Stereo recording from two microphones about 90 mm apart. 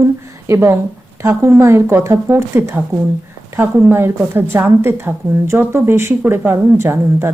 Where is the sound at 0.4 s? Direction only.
30° right (ahead or behind).